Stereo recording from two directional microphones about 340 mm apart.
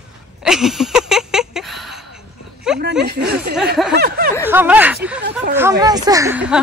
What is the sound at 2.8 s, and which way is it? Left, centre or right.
Speech, right.